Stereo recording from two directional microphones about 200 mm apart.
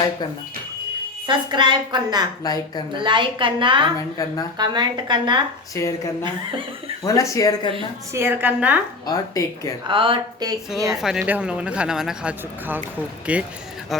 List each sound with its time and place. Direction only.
1.3 s a woman's voice: 25° right (ahead or behind)
2.4 s a woman's voice: 20° left (ahead or behind)
2.9 s a woman's voice: 25° right (ahead or behind)
5.8 s speech: 15° left (ahead or behind)
7.0 s speech: 15° left (ahead or behind)
8.1 s a woman's voice: 10° right (ahead or behind)
9.0 s speech: 20° left (ahead or behind)
9.8 s a woman's voice: 25° right (ahead or behind)
11.0 s a woman's voice: 5° right (ahead or behind)